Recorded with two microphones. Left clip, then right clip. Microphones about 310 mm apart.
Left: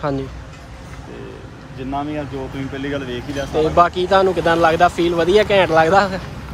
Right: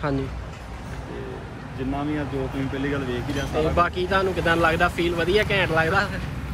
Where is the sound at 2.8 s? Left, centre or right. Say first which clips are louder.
Left 4 dB; left.